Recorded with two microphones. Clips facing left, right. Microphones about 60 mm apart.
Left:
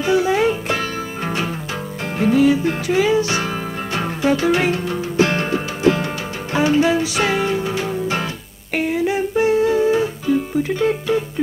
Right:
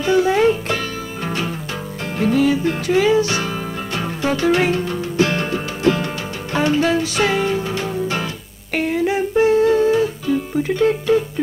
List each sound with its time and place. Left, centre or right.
0.0 s music: centre
5.1 s music: left; by 11.2 s centre